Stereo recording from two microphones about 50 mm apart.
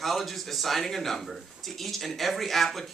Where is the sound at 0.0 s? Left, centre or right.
Centre.